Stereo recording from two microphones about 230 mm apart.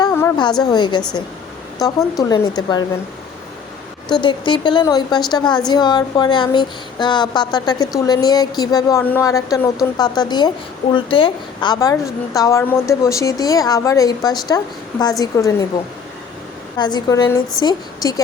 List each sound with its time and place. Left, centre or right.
0.0 s a sound: centre
0.6 s a woman's voice: centre
4.1 s a woman's voice: left
16.7 s a woman's voice: centre